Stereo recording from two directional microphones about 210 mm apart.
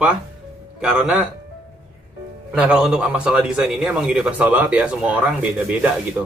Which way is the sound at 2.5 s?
5° right (ahead or behind).